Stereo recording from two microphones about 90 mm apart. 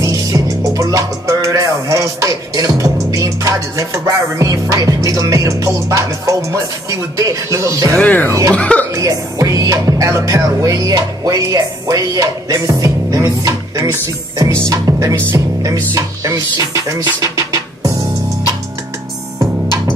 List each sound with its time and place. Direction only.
0.0 s music: 40° right (ahead or behind)
8.0 s speech: 20° left (ahead or behind)
8.3 s music: 35° right (ahead or behind)
8.5 s speech: 15° left (ahead or behind)
8.9 s music: 40° right (ahead or behind)